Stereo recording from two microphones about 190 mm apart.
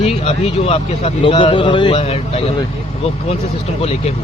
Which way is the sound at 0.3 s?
30° left (ahead or behind).